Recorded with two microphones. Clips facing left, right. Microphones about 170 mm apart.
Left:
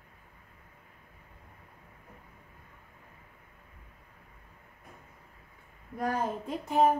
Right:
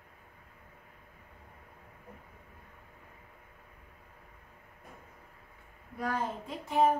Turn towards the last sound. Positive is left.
turn(degrees=45)  # may be behind; listen again after turning